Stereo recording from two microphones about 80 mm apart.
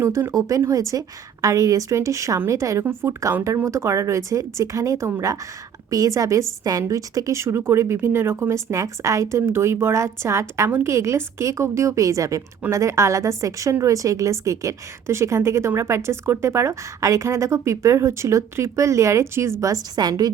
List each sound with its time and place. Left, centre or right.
0.0 s a woman's voice: right
0.3 s a woman's voice: right
2.8 s a woman's voice: right
20.0 s a woman's voice: right